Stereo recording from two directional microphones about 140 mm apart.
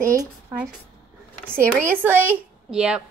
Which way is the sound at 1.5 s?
15° right (ahead or behind).